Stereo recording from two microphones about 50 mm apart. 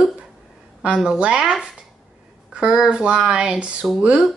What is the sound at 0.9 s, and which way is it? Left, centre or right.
Speech, centre.